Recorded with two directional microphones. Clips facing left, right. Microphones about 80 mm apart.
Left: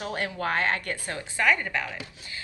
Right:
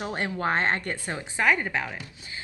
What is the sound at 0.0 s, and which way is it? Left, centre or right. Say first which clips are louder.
A woman's voice: right 2 dB; right.